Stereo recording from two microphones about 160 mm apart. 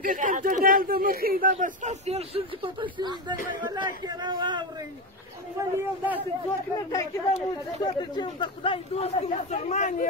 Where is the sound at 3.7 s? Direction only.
25° right (ahead or behind).